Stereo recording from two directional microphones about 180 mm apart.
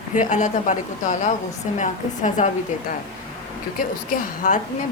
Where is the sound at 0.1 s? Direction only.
45° left (ahead or behind).